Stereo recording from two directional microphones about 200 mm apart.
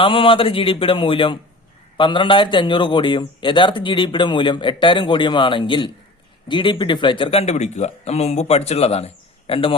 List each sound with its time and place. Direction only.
0.0 s a man's voice: 25° left (ahead or behind)